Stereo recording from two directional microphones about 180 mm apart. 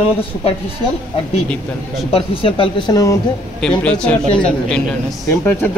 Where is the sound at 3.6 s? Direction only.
5° left (ahead or behind).